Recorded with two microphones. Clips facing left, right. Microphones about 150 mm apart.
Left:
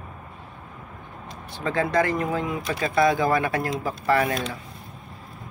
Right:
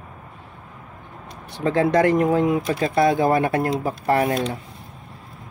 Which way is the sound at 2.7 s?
45° right (ahead or behind).